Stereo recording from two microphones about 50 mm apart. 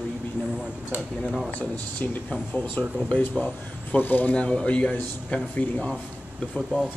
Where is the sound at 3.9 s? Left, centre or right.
Left.